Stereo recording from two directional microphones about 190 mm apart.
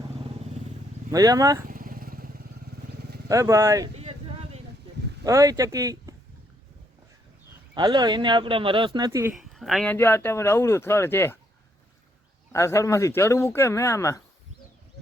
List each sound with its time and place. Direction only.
1.1 s speech: 20° right (ahead or behind)
1.6 s vehicle: 45° right (ahead or behind)
3.2 s speech: 15° right (ahead or behind)
3.9 s a sound: 35° right (ahead or behind)
5.2 s speech: 15° right (ahead or behind)
7.8 s speech: 25° right (ahead or behind)
9.3 s speech: centre (ahead or behind)
12.5 s speech: 15° left (ahead or behind)